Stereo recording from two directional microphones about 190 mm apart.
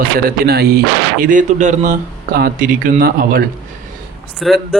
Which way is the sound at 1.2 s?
45° right (ahead or behind).